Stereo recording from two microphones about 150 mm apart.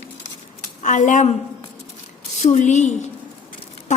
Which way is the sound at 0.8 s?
55° left (ahead or behind).